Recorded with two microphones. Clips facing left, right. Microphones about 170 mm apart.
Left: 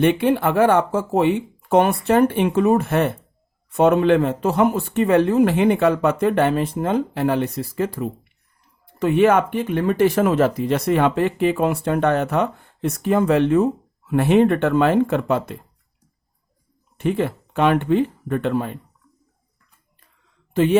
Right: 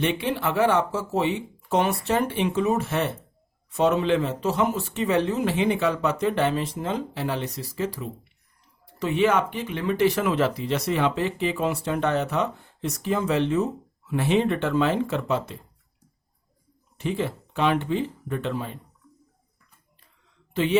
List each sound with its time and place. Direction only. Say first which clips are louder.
0.0 s speech: left 8 dB; 55° left (ahead or behind)
17.0 s speech: left 6 dB; 55° left (ahead or behind)
20.5 s speech: left 7 dB; 50° left (ahead or behind)